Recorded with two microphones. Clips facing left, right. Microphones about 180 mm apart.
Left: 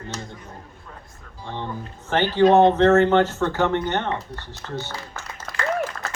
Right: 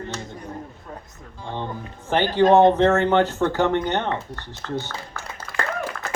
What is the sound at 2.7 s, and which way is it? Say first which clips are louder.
Speech: left 2 dB; 15° right (ahead or behind).